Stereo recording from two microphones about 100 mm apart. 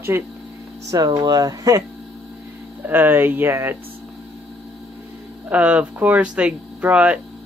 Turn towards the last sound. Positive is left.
turn(degrees=-15)  # may be behind; listen again after turning